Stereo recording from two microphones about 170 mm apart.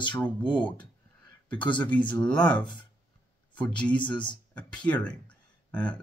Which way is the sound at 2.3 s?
25° left (ahead or behind).